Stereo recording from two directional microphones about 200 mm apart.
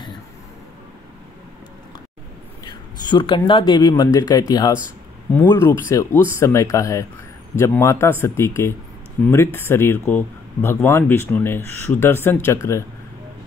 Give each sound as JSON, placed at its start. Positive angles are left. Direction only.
{"t": 3.1, "sound": "speech", "side_deg": 25}